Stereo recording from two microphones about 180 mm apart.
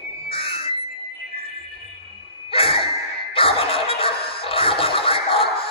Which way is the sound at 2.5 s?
30° left (ahead or behind).